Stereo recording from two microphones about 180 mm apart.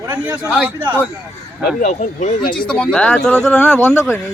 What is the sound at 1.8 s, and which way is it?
Speech, 45° left (ahead or behind).